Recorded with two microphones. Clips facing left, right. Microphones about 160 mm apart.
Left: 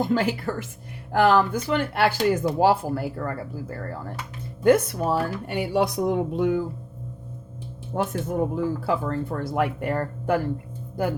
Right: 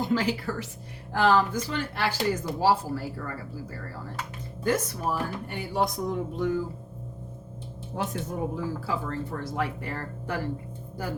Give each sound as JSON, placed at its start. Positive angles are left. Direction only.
{"t": 0.0, "sound": "speech", "side_deg": 50}
{"t": 4.6, "sound": "speech", "side_deg": 65}
{"t": 7.9, "sound": "speech", "side_deg": 55}